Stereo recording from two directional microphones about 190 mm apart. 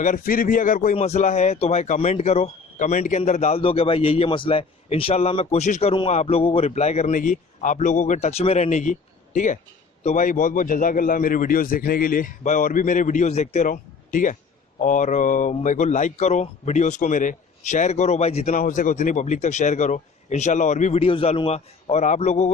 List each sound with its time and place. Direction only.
0.0 s a man's voice: 45° left (ahead or behind)
18.5 s speech: 45° left (ahead or behind)